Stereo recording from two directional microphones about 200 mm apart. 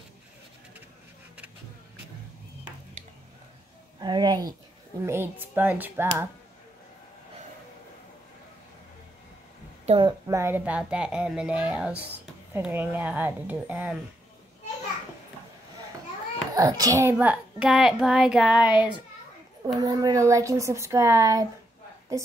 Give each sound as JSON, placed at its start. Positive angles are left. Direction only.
{"t": 4.0, "sound": "a child's voice", "side_deg": -20}
{"t": 9.8, "sound": "a child's voice", "side_deg": -25}
{"t": 16.5, "sound": "a child's voice", "side_deg": -20}
{"t": 19.6, "sound": "a child's voice", "side_deg": -20}